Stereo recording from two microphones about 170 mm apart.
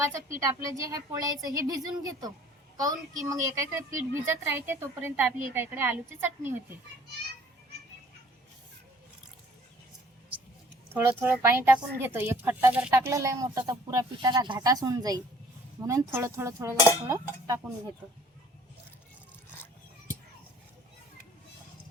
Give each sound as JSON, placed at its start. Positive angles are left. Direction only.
{"t": 0.3, "sound": "a woman's voice", "side_deg": -20}
{"t": 10.9, "sound": "a woman's voice", "side_deg": -10}